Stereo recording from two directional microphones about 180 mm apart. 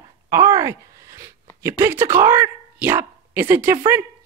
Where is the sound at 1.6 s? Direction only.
15° right (ahead or behind).